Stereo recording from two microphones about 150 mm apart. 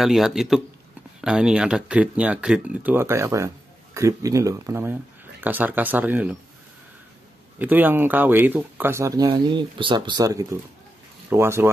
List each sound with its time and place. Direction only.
0.0 s speech: centre (ahead or behind)
7.5 s speech: 10° right (ahead or behind)